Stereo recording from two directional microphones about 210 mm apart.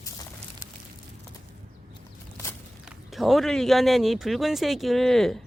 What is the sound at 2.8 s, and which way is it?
Speech, 5° right (ahead or behind).